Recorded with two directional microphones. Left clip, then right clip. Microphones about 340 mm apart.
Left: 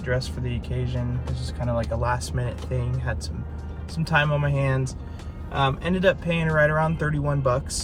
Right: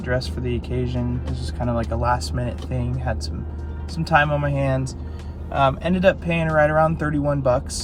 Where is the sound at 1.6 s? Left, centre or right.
Centre.